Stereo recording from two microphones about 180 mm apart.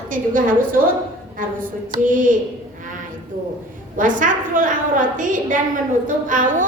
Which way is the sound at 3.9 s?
45° right (ahead or behind).